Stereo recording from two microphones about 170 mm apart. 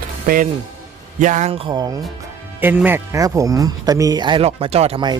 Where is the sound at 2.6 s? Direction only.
10° right (ahead or behind); by 5.1 s 30° right (ahead or behind).